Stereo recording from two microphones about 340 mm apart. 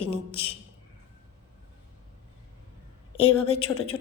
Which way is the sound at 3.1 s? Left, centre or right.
Centre.